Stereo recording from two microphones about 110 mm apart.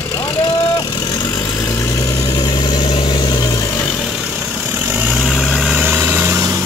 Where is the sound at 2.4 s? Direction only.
40° left (ahead or behind).